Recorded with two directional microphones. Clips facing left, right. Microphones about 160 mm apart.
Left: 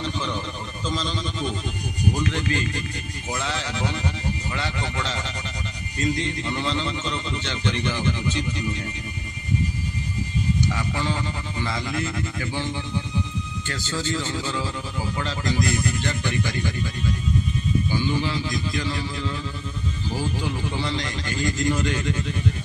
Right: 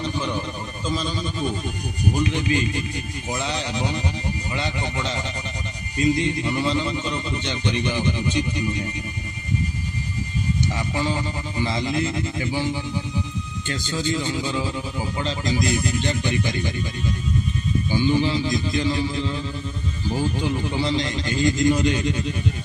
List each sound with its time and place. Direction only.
0.0 s a sound: 15° right (ahead or behind)
0.8 s a man's voice: 10° right (ahead or behind)
11.0 s speech: 15° right (ahead or behind)
17.9 s speech: 20° right (ahead or behind)